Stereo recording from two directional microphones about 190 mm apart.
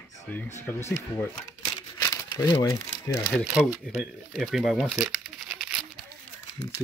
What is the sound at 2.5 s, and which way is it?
Speech, 20° left (ahead or behind).